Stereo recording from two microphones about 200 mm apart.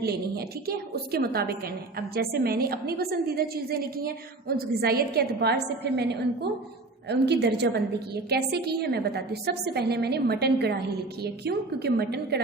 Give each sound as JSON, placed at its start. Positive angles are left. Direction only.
{"t": 0.0, "sound": "a woman's voice", "side_deg": -50}